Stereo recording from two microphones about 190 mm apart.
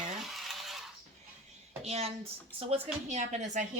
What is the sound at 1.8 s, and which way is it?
A woman's voice, 30° right (ahead or behind).